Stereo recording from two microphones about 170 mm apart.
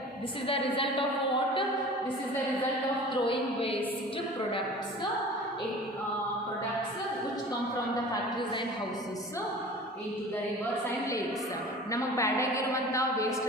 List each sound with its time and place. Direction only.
0.4 s a woman's voice: 35° left (ahead or behind)
3.2 s a woman's voice: 30° left (ahead or behind)
11.9 s a woman's voice: 15° left (ahead or behind)